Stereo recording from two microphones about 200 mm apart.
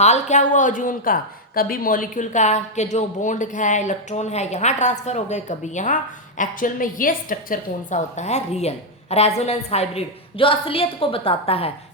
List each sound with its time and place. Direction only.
0.0 s a woman's voice: 35° left (ahead or behind)